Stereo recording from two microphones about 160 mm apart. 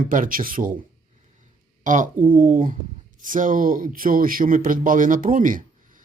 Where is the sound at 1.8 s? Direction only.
55° right (ahead or behind).